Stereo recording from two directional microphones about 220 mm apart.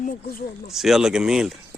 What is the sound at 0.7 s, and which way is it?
Speech, centre (ahead or behind).